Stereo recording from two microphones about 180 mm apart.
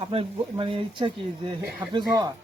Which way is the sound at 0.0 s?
30° right (ahead or behind).